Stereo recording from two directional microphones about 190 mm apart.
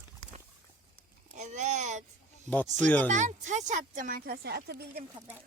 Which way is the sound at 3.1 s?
40° right (ahead or behind).